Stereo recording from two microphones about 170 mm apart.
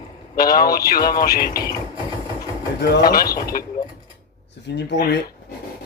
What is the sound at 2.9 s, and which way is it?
Speech, 60° left (ahead or behind).